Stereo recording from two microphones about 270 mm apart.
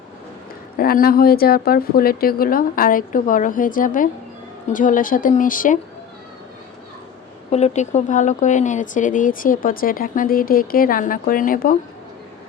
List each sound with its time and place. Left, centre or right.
0.8 s a woman's voice: left
7.5 s speech: left